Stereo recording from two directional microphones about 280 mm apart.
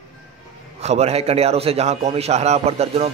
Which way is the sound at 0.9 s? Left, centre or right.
Right.